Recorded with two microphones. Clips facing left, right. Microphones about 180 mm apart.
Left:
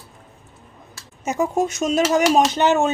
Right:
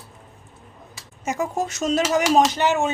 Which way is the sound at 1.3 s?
20° left (ahead or behind).